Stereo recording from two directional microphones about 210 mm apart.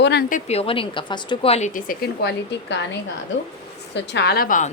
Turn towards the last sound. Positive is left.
turn(degrees=40)  # may be behind; listen again after turning